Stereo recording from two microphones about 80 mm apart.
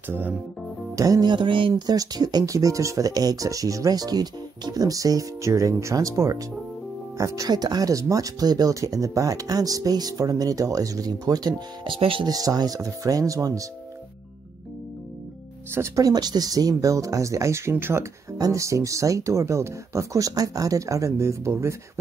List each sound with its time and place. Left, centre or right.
0.1 s speech: right
0.9 s speech: right
1.3 s speech: right
7.4 s speech: right
12.3 s speech: right
16.0 s speech: right
18.4 s speech: right